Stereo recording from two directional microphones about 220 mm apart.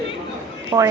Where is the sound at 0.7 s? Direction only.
20° right (ahead or behind).